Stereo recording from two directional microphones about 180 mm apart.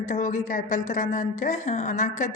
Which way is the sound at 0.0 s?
45° left (ahead or behind).